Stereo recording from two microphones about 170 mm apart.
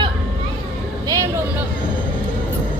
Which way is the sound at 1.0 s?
20° right (ahead or behind).